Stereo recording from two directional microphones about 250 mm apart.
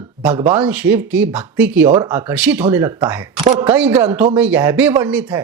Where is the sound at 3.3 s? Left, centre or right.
Right.